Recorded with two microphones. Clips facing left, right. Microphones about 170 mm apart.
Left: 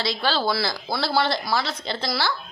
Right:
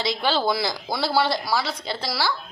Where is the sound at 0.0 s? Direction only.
15° right (ahead or behind).